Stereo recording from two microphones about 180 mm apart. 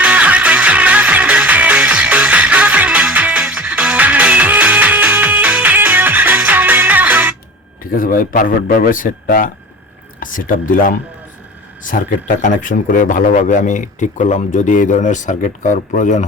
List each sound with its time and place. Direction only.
0.0 s music: 5° right (ahead or behind)
7.9 s speech: 50° left (ahead or behind)